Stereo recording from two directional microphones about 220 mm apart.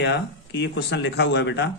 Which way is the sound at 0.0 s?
50° left (ahead or behind).